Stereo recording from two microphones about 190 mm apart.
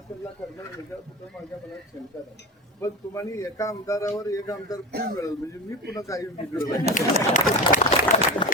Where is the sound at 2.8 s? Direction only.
15° left (ahead or behind).